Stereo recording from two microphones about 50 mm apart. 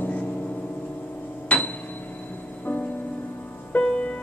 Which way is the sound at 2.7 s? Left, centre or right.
Left.